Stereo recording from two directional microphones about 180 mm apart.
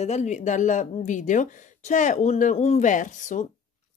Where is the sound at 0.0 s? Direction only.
40° left (ahead or behind).